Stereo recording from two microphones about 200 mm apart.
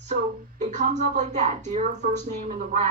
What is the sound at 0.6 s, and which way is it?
Speech, 35° right (ahead or behind).